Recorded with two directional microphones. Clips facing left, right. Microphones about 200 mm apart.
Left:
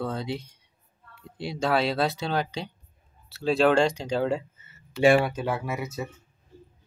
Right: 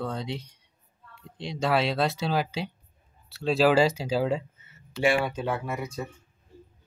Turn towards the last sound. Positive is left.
turn(degrees=5)  # may be behind; listen again after turning